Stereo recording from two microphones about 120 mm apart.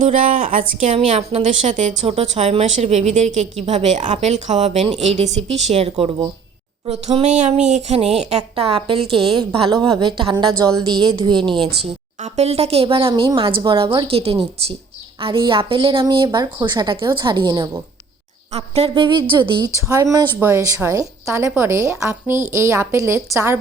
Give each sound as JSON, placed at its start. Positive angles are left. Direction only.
{"t": 0.0, "sound": "speech", "side_deg": -90}
{"t": 0.9, "sound": "speech", "side_deg": -55}
{"t": 3.7, "sound": "a woman's voice", "side_deg": -70}
{"t": 7.3, "sound": "a sound", "side_deg": -80}
{"t": 7.7, "sound": "a woman's voice", "side_deg": -70}
{"t": 11.4, "sound": "speech", "side_deg": 5}
{"t": 12.2, "sound": "a woman's voice", "side_deg": -60}
{"t": 15.2, "sound": "a woman's voice", "side_deg": -40}
{"t": 18.5, "sound": "a woman's voice", "side_deg": -55}
{"t": 19.0, "sound": "a woman's voice", "side_deg": -40}
{"t": 19.7, "sound": "speech", "side_deg": -25}